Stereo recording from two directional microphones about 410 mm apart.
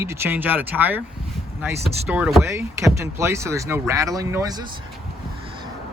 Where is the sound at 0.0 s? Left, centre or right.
Centre.